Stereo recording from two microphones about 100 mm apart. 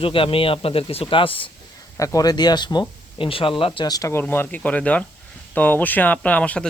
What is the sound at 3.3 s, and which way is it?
Speech, 65° left (ahead or behind).